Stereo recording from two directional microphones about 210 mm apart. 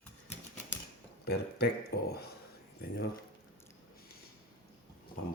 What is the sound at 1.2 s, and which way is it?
Speech, 50° left (ahead or behind).